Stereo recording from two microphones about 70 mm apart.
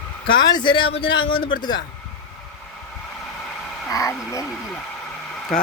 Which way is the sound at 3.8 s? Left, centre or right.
Left.